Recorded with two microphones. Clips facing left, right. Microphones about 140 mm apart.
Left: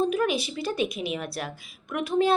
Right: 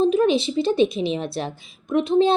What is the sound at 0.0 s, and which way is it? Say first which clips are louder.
A woman's voice: right 7 dB; 25° right (ahead or behind).